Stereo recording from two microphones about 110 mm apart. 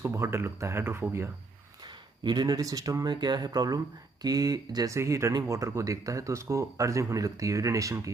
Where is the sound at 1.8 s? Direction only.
40° right (ahead or behind).